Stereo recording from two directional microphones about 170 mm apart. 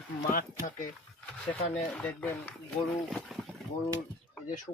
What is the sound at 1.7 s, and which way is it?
Speech, 5° left (ahead or behind).